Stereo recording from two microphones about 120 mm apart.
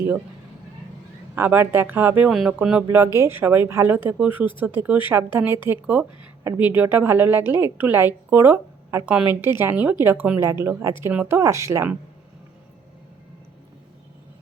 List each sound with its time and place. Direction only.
1.4 s a woman's voice: 15° right (ahead or behind)
2.9 s a woman's voice: 20° right (ahead or behind)